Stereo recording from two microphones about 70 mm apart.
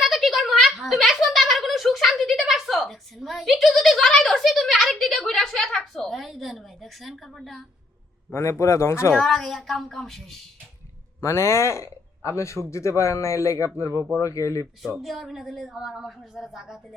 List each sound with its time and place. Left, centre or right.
0.0 s a sound: centre
7.3 s a woman's voice: centre
8.3 s speech: left
9.1 s a woman's voice: centre
11.2 s speech: left
13.9 s speech: right
14.2 s speech: left
14.8 s a woman's voice: centre